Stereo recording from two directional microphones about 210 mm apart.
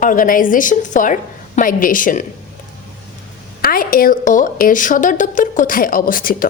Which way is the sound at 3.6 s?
45° left (ahead or behind).